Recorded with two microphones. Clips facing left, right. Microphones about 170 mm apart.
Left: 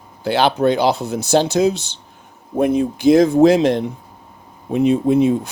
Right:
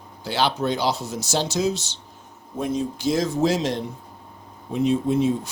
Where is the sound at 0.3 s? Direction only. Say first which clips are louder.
Left 7 dB; 55° left (ahead or behind).